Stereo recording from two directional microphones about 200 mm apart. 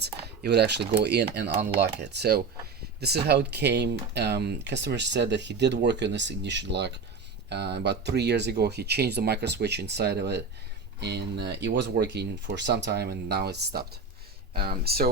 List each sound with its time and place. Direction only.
0.0 s cutlery: 55° right (ahead or behind)
1.0 s speech: 55° right (ahead or behind)